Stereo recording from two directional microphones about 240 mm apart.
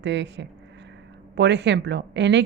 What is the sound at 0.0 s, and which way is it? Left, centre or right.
Speech, right.